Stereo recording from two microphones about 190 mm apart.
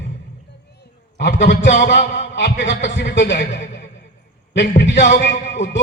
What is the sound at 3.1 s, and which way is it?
Speech, 70° left (ahead or behind).